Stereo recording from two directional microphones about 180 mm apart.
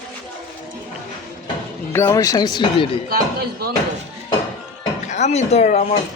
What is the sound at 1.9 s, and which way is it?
Speech, 15° left (ahead or behind).